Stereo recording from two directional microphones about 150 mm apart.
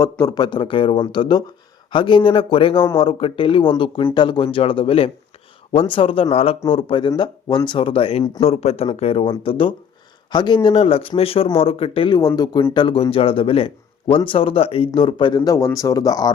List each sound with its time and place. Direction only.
0.0 s speech: 25° left (ahead or behind)
15.4 s speech: 20° left (ahead or behind)